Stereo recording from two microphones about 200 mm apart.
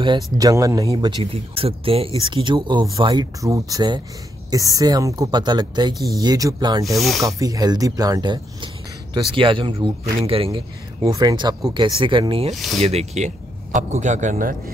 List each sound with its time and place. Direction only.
0.0 s speech: 20° right (ahead or behind)
6.8 s speech: centre (ahead or behind)
7.2 s speech: 15° right (ahead or behind)
12.5 s speech: centre (ahead or behind)
12.8 s speech: 35° right (ahead or behind)